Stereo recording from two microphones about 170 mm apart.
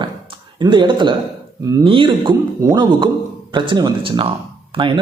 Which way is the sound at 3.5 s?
30° right (ahead or behind).